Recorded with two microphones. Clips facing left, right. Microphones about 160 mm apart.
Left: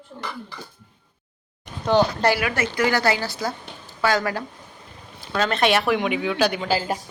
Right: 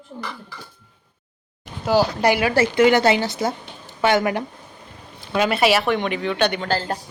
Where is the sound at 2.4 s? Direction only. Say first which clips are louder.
Right 6 dB; 30° right (ahead or behind).